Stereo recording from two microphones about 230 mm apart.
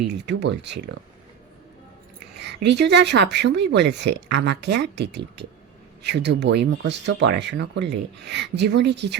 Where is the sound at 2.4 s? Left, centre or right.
Right.